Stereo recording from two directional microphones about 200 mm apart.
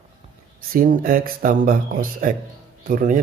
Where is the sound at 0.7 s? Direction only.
45° right (ahead or behind).